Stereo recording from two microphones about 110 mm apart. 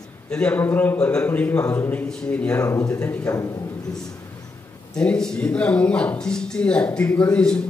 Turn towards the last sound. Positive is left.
turn(degrees=10)  # may be behind; listen again after turning